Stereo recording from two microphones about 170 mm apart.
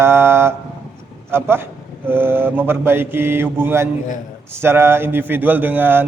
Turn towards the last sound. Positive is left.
turn(degrees=-10)  # may be behind; listen again after turning